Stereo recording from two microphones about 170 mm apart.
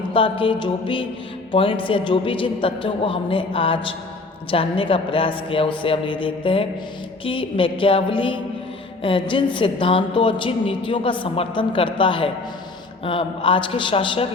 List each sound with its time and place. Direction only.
0.1 s a woman's voice: 30° left (ahead or behind)